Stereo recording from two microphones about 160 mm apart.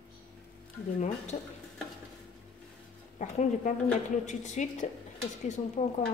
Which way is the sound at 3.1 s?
50° left (ahead or behind).